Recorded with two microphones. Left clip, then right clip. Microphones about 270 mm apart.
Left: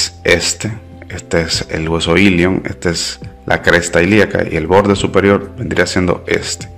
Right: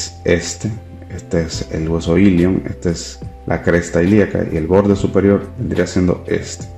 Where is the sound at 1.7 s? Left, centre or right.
Left.